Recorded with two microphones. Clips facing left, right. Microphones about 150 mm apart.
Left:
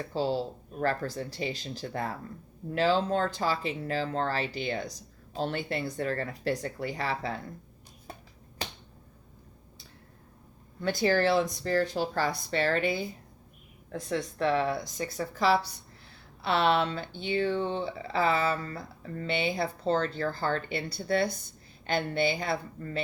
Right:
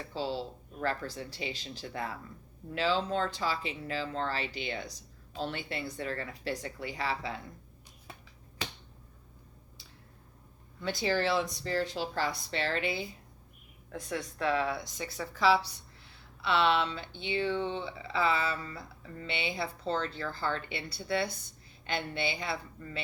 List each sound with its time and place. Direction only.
0.1 s speech: 45° left (ahead or behind)
8.1 s finger snapping: 40° left (ahead or behind)
10.8 s speech: 50° left (ahead or behind)
13.9 s a woman's voice: 30° left (ahead or behind)
14.4 s speech: 40° left (ahead or behind)